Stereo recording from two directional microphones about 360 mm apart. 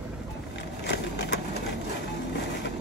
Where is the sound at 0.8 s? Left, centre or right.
Left.